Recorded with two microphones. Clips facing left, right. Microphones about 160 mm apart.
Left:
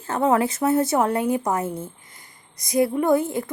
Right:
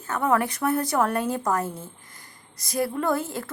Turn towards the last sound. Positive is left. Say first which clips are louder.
# left 6 dB
turn(degrees=20)  # may be behind; listen again after turning